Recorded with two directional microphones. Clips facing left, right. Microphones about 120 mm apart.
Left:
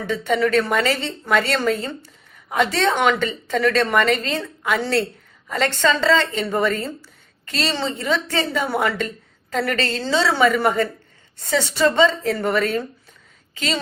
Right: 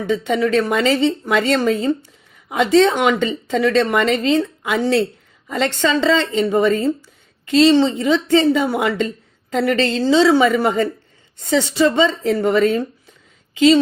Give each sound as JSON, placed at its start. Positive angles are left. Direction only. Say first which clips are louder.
{"t": 0.1, "sound": "a woman's voice", "louder": "right 2 dB", "side_deg": -20}